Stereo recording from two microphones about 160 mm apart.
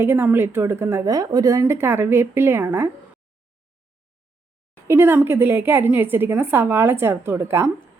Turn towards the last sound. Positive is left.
turn(degrees=-15)  # may be behind; listen again after turning